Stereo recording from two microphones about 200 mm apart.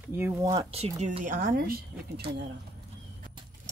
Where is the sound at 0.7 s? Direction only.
30° right (ahead or behind); by 2.2 s 50° right (ahead or behind).